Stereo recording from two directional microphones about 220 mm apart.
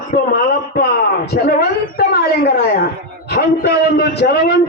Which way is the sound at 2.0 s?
45° left (ahead or behind).